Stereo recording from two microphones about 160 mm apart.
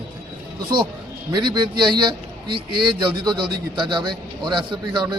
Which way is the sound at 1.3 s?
30° right (ahead or behind).